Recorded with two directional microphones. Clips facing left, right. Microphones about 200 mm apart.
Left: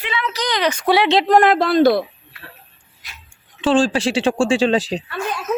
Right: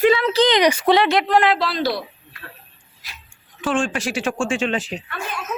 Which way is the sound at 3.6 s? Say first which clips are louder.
Left 6 dB; 30° left (ahead or behind).